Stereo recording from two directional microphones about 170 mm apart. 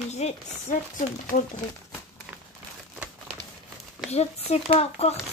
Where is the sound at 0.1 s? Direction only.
45° left (ahead or behind).